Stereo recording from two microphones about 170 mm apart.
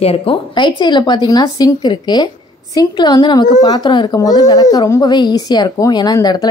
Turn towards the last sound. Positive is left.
turn(degrees=25)  # may be behind; listen again after turning